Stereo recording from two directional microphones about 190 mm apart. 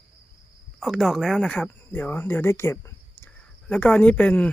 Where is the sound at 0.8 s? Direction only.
Centre (ahead or behind).